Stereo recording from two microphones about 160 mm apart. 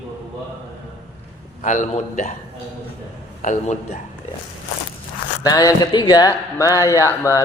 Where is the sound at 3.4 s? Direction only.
50° left (ahead or behind).